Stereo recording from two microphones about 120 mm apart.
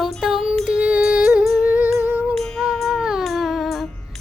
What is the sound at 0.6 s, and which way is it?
Music, 10° right (ahead or behind).